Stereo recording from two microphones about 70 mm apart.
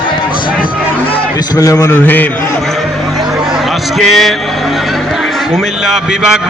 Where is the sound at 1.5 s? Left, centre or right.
Left.